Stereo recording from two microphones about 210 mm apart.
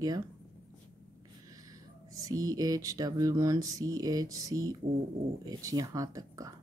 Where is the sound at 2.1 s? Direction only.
15° right (ahead or behind).